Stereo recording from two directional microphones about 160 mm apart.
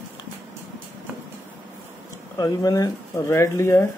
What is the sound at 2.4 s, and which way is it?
Speech, 20° left (ahead or behind).